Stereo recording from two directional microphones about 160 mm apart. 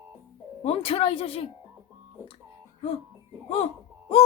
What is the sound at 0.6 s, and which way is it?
Speech, 35° left (ahead or behind).